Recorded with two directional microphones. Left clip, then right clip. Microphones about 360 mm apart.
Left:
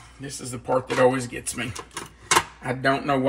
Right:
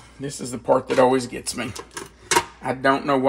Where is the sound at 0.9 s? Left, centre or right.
Right.